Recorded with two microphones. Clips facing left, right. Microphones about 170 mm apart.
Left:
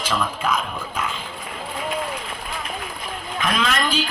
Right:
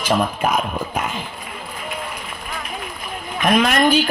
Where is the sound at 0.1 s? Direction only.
55° right (ahead or behind).